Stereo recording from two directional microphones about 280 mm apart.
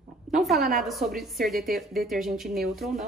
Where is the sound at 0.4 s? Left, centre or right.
Centre.